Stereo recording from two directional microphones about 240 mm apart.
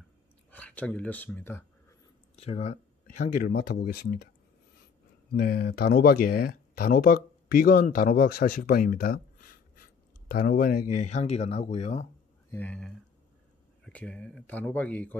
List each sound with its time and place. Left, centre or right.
0.5 s speech: centre
2.3 s speech: left
3.3 s speech: left
5.3 s speech: left
12.4 s speech: centre